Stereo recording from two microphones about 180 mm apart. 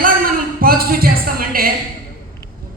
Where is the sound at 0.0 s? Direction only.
55° right (ahead or behind).